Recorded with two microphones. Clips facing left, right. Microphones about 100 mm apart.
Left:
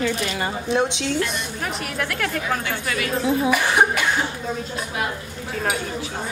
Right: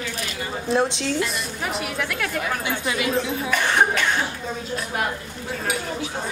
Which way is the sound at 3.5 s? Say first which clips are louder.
Even; 10° left (ahead or behind).